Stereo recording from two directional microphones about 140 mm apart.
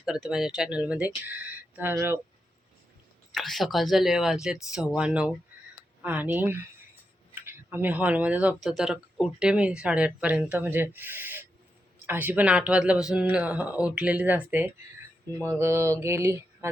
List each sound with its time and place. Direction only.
0.0 s speech: 5° right (ahead or behind)
3.3 s speech: centre (ahead or behind)
15.4 s mantra: 20° right (ahead or behind)